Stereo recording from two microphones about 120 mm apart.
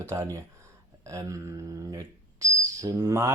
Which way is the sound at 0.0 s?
25° right (ahead or behind).